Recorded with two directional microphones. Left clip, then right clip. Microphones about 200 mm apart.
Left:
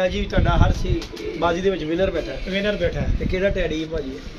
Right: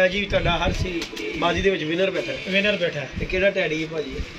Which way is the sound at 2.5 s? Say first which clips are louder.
Right 1 dB; 20° left (ahead or behind).